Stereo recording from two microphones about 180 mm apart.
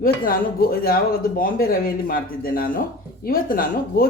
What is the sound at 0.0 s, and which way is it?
Speech, 55° left (ahead or behind).